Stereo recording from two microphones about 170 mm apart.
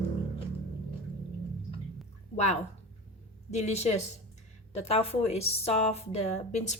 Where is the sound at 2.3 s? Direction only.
40° left (ahead or behind).